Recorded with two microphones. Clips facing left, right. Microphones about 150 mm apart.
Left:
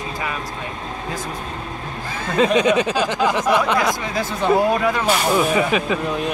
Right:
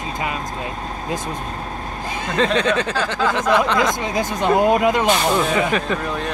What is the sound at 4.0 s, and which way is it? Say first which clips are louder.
Speech: right 1 dB; 15° right (ahead or behind).